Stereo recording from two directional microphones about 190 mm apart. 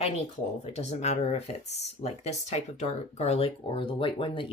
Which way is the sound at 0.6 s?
35° left (ahead or behind).